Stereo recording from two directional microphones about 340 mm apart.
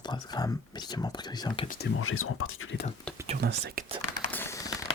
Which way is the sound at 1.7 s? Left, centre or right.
Left.